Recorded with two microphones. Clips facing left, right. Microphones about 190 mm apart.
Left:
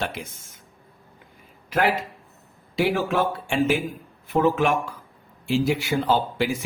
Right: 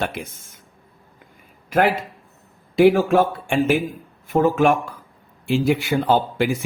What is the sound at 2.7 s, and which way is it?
Speech, 50° right (ahead or behind).